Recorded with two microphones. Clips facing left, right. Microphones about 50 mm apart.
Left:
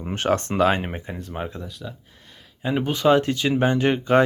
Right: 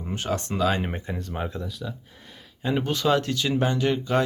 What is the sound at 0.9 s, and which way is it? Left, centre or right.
Speech, centre.